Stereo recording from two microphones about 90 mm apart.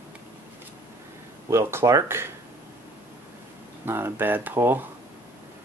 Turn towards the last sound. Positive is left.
turn(degrees=-25)  # may be behind; listen again after turning